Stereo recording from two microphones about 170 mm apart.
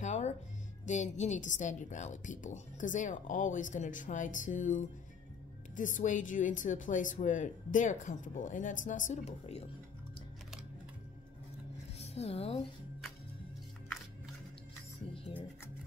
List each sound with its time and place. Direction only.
0.0 s music: 45° left (ahead or behind)
0.8 s a woman's voice: 45° left (ahead or behind)
12.0 s speech: 35° left (ahead or behind)